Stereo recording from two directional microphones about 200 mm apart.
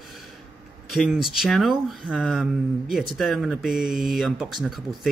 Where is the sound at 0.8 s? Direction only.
Centre (ahead or behind).